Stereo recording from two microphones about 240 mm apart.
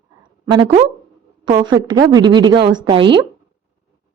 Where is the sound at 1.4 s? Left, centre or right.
Centre.